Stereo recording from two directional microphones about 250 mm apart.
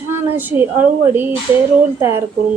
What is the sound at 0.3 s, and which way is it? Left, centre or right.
A woman's voice, centre.